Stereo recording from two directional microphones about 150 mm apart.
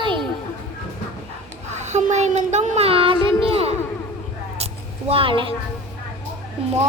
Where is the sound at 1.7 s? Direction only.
50° right (ahead or behind).